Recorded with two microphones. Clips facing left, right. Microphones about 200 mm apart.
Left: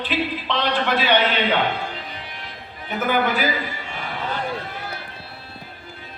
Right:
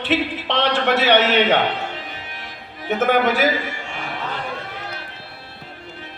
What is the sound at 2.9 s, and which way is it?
Speech, 80° right.